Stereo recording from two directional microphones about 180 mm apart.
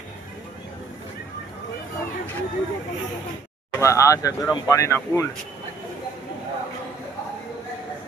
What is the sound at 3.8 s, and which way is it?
Speech, 15° left (ahead or behind).